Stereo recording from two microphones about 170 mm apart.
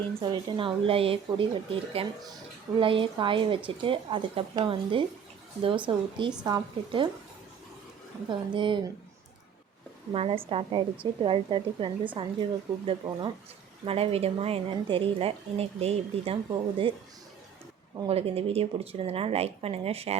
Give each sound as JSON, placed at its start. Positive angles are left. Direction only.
{"t": 0.2, "sound": "a woman's voice", "side_deg": -30}
{"t": 8.3, "sound": "a woman's voice", "side_deg": -30}
{"t": 10.1, "sound": "a woman's voice", "side_deg": -35}
{"t": 18.1, "sound": "a woman's voice", "side_deg": -35}